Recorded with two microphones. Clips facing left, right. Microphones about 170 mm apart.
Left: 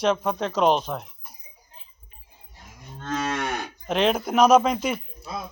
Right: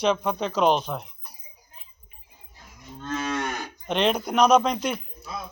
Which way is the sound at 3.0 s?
75° left (ahead or behind).